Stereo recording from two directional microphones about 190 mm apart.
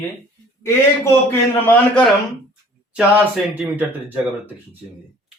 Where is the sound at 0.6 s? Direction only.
15° left (ahead or behind).